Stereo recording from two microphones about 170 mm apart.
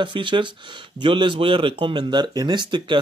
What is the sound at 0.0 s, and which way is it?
Speech, 30° right (ahead or behind).